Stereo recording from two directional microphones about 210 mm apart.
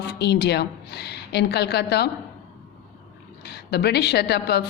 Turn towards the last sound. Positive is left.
turn(degrees=50)  # may be behind; listen again after turning